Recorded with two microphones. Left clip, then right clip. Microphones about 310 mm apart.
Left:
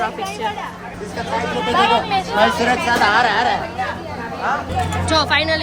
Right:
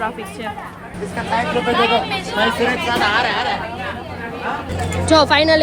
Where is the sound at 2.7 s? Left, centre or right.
Left.